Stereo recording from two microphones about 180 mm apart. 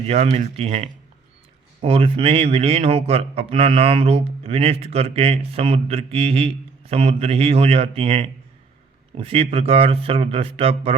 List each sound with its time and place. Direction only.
0.1 s a man's voice: 35° right (ahead or behind)